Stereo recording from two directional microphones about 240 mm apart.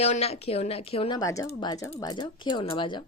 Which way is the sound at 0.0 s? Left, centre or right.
Left.